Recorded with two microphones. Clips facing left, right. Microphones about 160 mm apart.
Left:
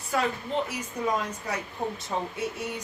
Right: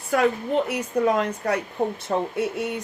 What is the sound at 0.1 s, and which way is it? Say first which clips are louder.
Speech: right 7 dB; 60° right (ahead or behind).